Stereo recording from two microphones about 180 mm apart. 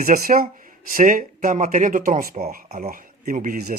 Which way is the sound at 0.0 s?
50° right (ahead or behind).